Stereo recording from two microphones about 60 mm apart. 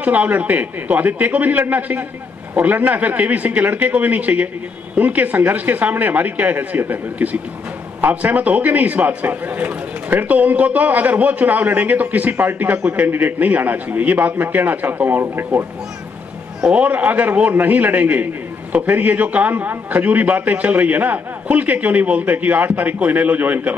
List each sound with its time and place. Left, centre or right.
0.0 s a man's voice: right
16.6 s a man's voice: right